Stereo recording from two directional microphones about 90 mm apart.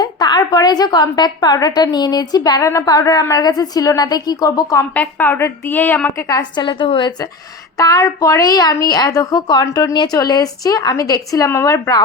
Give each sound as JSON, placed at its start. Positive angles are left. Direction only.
{"t": 0.0, "sound": "a woman's voice", "side_deg": 50}
{"t": 4.9, "sound": "a woman's voice", "side_deg": 20}
{"t": 6.1, "sound": "a woman's voice", "side_deg": 35}
{"t": 6.6, "sound": "a woman's voice", "side_deg": 60}
{"t": 7.8, "sound": "a woman's voice", "side_deg": 40}